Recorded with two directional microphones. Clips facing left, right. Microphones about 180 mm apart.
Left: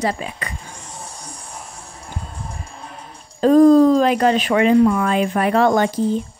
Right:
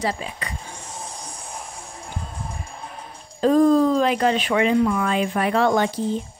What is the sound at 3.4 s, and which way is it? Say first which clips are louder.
Speech: left 5 dB; 45° left (ahead or behind).